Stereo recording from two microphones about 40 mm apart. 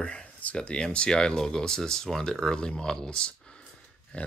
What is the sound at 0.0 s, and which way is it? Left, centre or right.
Speech, left.